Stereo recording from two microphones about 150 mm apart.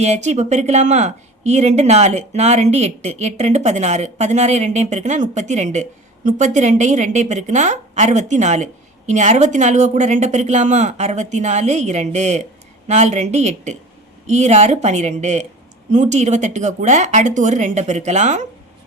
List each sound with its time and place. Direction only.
0.0 s a woman's voice: 50° right (ahead or behind)